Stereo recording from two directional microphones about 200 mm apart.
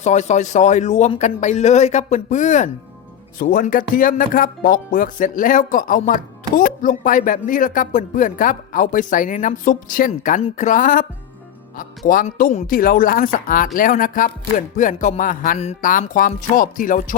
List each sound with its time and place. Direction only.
0.0 s speech: 35° left (ahead or behind)